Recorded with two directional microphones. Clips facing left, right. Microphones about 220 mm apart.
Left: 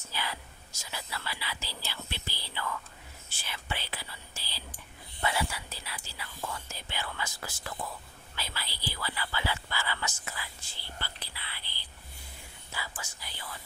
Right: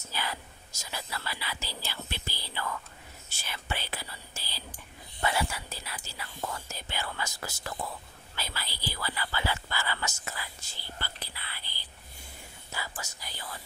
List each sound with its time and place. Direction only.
0.1 s speech: 45° right (ahead or behind)